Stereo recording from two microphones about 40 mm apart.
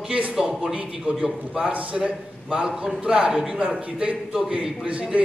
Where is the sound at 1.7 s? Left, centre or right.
Right.